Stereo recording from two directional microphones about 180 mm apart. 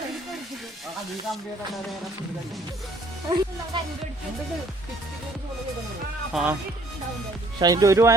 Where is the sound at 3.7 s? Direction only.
25° right (ahead or behind).